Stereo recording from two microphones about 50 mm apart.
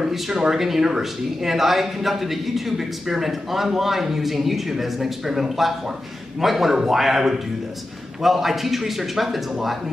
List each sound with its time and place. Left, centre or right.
0.1 s speech: centre